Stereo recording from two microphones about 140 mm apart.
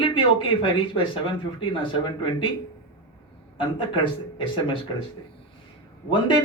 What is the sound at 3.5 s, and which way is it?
Speech, 35° left (ahead or behind).